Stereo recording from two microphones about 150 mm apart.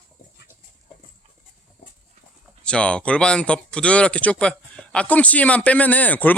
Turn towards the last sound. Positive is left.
turn(degrees=10)  # may be behind; listen again after turning